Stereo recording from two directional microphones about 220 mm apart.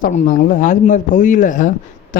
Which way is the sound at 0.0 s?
35° left (ahead or behind).